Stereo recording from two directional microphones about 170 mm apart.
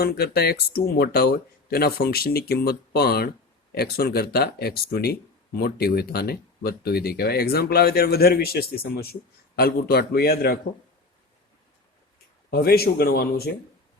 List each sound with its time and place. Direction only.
0.0 s speech: 65° left (ahead or behind)
12.5 s speech: 65° left (ahead or behind)